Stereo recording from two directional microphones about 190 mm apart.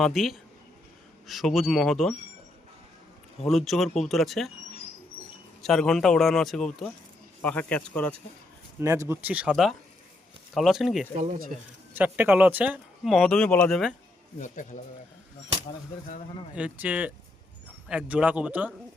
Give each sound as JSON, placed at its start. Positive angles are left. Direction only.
{"t": 0.0, "sound": "speech", "side_deg": 0}
{"t": 3.4, "sound": "speech", "side_deg": 0}
{"t": 5.6, "sound": "speech", "side_deg": 0}
{"t": 8.8, "sound": "a man's voice", "side_deg": -15}
{"t": 11.5, "sound": "speech", "side_deg": -40}
{"t": 11.9, "sound": "speech", "side_deg": -10}
{"t": 14.3, "sound": "speech", "side_deg": 40}
{"t": 16.6, "sound": "a man's voice", "side_deg": -5}